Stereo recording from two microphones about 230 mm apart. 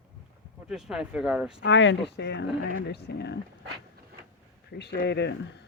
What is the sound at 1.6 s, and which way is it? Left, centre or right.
Speech, left.